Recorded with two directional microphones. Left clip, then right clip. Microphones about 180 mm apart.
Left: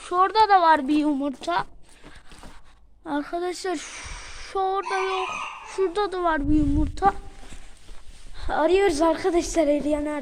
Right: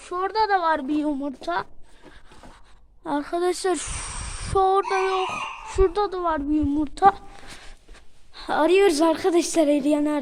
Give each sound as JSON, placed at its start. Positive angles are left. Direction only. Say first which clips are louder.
{"t": 0.0, "sound": "speech", "louder": "left 4 dB", "side_deg": 0}
{"t": 3.0, "sound": "speech", "louder": "right 3 dB", "side_deg": -25}
{"t": 5.9, "sound": "speech", "louder": "even", "side_deg": -10}
{"t": 6.8, "sound": "speech", "louder": "right 4 dB", "side_deg": -30}
{"t": 8.4, "sound": "a woman's voice", "louder": "right 2 dB", "side_deg": -30}